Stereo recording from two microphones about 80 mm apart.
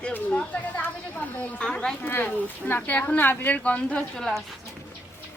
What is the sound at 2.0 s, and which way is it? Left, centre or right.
Speech, left.